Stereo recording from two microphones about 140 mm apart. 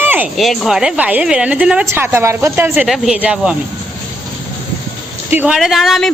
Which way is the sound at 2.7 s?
Centre (ahead or behind).